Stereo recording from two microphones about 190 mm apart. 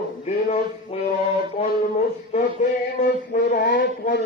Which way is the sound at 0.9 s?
30° left (ahead or behind).